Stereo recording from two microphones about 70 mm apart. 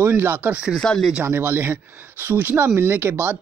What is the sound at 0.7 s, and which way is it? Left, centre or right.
Speech, centre.